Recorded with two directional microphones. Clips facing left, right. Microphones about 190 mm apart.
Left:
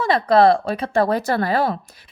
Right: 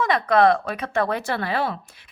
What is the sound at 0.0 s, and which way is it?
Speech, 30° left (ahead or behind).